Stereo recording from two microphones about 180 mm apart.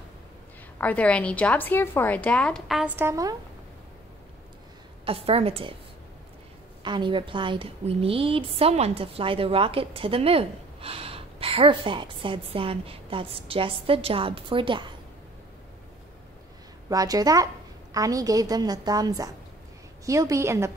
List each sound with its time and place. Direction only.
0.7 s a woman's voice: 10° left (ahead or behind)
3.0 s a woman's voice: 15° right (ahead or behind)
5.0 s a woman's voice: 30° right (ahead or behind)
6.8 s a woman's voice: 25° right (ahead or behind)
16.9 s a woman's voice: 20° right (ahead or behind)